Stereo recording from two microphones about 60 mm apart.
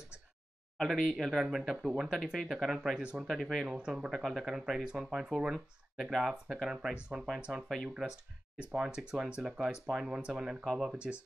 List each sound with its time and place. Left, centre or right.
0.7 s speech: centre
3.3 s speech: centre
3.6 s speech: centre
7.6 s speech: centre
8.5 s speech: centre
10.6 s speech: centre
10.9 s speech: centre